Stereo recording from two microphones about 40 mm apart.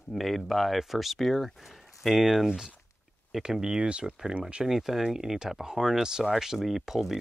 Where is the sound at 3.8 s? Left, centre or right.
Right.